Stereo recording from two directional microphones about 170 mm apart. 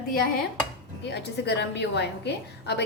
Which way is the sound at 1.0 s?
90° left.